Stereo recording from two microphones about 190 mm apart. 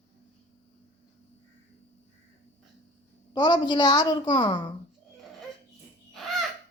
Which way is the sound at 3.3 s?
25° left (ahead or behind).